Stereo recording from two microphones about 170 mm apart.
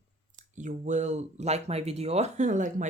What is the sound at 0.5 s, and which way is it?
Speech, 45° right (ahead or behind).